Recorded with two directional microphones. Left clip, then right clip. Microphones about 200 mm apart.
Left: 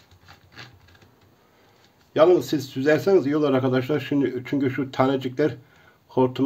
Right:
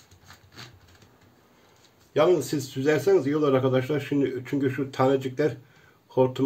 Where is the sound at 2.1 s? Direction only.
55° left (ahead or behind).